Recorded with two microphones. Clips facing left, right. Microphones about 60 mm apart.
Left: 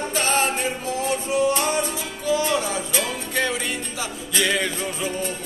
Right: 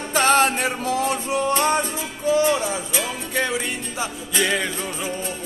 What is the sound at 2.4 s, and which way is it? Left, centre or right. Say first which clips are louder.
Music: right 2 dB; centre.